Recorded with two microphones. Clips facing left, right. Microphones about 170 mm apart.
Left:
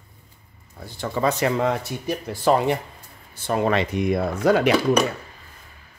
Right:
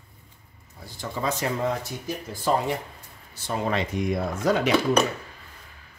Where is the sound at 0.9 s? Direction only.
65° left (ahead or behind).